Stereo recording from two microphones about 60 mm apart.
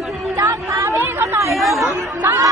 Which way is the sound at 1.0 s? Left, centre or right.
Right.